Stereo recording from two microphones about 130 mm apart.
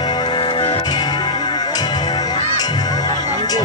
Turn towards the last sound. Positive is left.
turn(degrees=30)  # may be behind; listen again after turning